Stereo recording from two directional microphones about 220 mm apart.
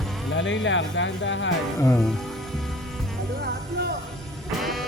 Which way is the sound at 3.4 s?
45° right (ahead or behind).